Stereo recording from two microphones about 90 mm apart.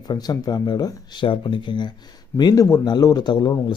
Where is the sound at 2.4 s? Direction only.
45° left (ahead or behind).